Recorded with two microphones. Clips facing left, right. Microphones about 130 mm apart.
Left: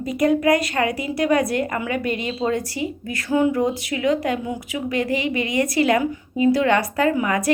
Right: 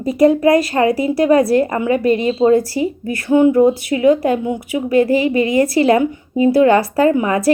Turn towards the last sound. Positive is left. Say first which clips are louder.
# right 6 dB
turn(degrees=-30)  # may be behind; listen again after turning